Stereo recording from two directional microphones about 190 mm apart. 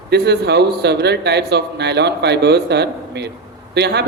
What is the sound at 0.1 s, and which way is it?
A man's voice, 60° right (ahead or behind).